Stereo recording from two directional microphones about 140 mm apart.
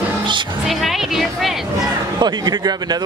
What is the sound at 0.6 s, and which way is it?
Speech, centre (ahead or behind).